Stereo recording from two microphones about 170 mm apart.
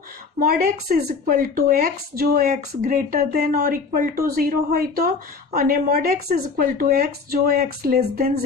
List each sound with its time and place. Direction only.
0.3 s speech: 65° right (ahead or behind)
2.5 s speech: 50° right (ahead or behind)